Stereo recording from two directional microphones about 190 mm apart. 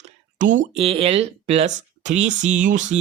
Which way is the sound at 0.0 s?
40° right (ahead or behind).